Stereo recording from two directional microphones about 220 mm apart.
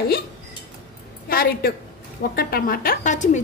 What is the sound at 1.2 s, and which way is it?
A woman's voice, 45° left (ahead or behind).